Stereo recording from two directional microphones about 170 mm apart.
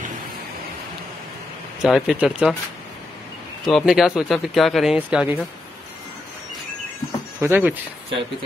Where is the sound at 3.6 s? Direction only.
Centre (ahead or behind).